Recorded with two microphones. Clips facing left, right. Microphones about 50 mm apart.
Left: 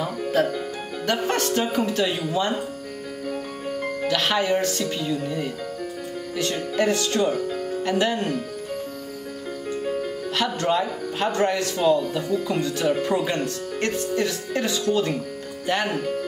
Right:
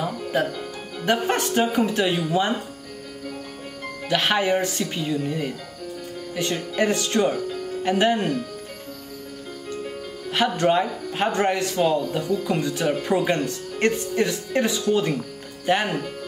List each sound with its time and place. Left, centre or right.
0.3 s speech: centre
4.1 s speech: right
6.5 s speech: centre
10.3 s speech: right